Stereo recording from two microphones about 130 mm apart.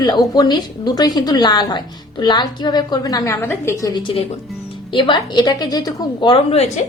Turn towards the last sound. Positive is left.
turn(degrees=35)  # may be behind; listen again after turning